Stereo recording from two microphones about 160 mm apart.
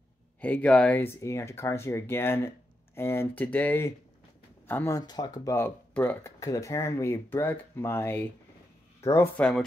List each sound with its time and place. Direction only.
0.4 s speech: 10° left (ahead or behind)
9.4 s speech: 5° left (ahead or behind)